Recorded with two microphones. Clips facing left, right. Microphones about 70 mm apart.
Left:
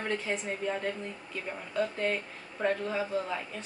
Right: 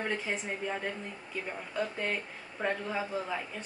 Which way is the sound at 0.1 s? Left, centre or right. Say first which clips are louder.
Left 2 dB; centre.